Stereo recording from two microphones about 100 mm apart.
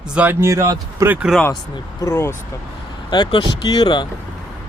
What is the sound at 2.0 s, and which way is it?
Speech, 30° left (ahead or behind).